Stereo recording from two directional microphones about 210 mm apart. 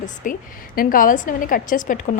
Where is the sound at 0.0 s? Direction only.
35° left (ahead or behind).